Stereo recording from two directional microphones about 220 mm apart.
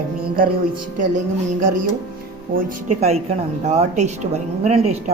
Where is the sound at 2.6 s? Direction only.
35° right (ahead or behind).